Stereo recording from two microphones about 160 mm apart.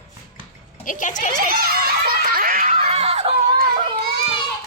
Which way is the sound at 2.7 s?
40° right (ahead or behind).